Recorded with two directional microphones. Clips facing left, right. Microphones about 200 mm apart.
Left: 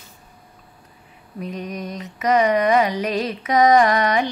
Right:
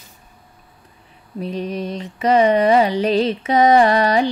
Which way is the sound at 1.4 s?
30° right (ahead or behind).